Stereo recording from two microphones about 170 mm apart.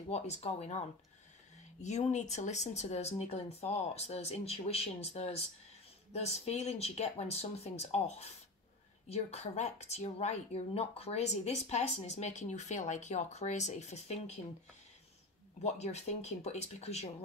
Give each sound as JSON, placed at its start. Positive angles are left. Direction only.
{"t": 0.1, "sound": "speech", "side_deg": 40}
{"t": 15.6, "sound": "speech", "side_deg": 40}